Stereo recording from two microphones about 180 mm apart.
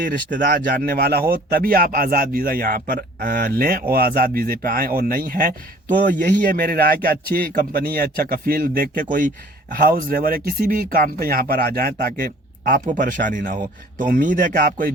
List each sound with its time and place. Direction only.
0.0 s speech: 50° right (ahead or behind)